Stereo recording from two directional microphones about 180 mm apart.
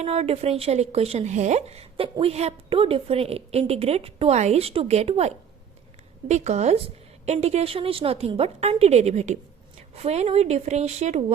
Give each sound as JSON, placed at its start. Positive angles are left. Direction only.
{"t": 0.0, "sound": "speech", "side_deg": -35}